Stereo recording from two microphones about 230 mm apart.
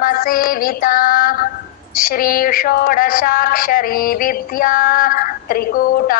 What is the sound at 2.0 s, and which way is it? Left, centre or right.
Speech, left.